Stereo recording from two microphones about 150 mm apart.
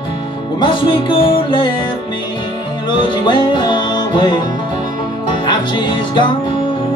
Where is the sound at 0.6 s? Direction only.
30° left (ahead or behind).